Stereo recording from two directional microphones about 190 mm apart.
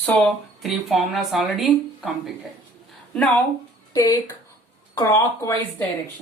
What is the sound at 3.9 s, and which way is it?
Speech, 20° left (ahead or behind).